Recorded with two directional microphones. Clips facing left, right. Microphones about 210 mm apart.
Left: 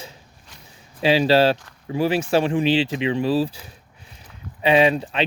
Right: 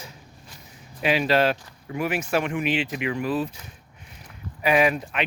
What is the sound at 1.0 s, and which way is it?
Speech, 30° left (ahead or behind).